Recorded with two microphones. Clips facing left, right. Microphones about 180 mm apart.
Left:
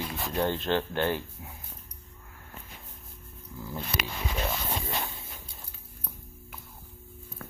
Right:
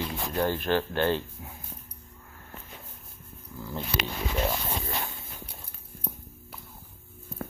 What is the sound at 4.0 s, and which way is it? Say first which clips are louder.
Speech: right 2 dB; 5° left (ahead or behind).